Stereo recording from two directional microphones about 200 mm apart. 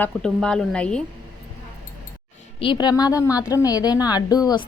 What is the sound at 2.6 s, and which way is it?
A woman's voice, 25° left (ahead or behind).